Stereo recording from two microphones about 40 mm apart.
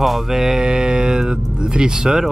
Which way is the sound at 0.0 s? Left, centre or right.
Centre.